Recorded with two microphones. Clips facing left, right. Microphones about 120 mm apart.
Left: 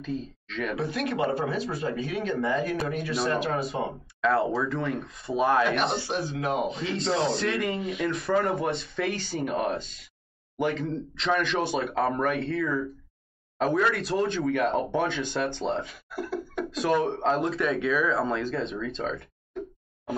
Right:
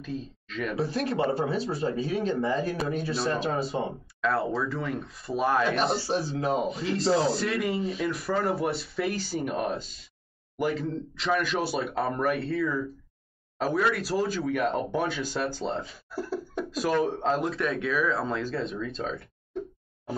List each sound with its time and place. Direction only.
0.0 s speech: 5° right (ahead or behind)
0.7 s speech: 30° right (ahead or behind)
4.2 s speech: centre (ahead or behind)
6.0 s speech: 35° right (ahead or behind)
6.6 s speech: centre (ahead or behind)
15.9 s speech: 30° right (ahead or behind)
17.0 s speech: 5° right (ahead or behind)